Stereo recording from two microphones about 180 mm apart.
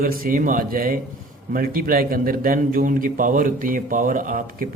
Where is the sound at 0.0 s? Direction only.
55° right (ahead or behind).